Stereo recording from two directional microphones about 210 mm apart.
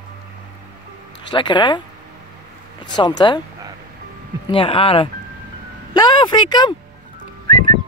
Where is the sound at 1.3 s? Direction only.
20° left (ahead or behind).